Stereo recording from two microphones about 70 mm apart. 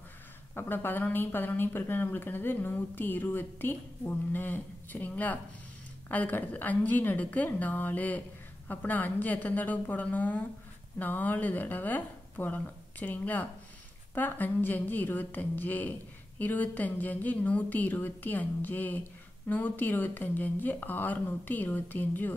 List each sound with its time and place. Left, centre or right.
0.6 s speech: left